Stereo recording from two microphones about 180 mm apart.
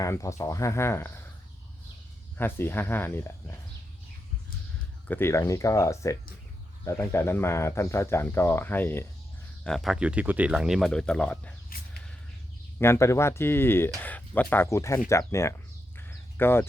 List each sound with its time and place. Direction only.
0.0 s speech: 15° left (ahead or behind)
2.4 s speech: 10° left (ahead or behind)
5.0 s speech: 10° left (ahead or behind)
9.6 s speech: centre (ahead or behind)
12.8 s speech: 15° left (ahead or behind)
16.0 s a sound: 10° left (ahead or behind)